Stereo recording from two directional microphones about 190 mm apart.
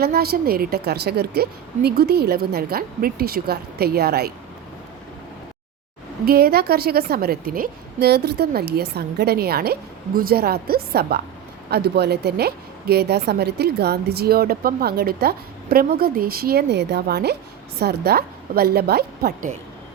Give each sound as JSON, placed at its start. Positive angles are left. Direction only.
{"t": 0.0, "sound": "a woman's voice", "side_deg": -55}
{"t": 6.2, "sound": "a woman's voice", "side_deg": -55}